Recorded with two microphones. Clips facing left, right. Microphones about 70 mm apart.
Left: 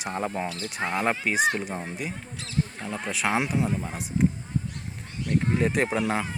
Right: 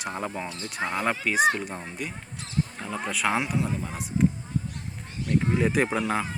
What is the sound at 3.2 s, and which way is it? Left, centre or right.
Speech, centre.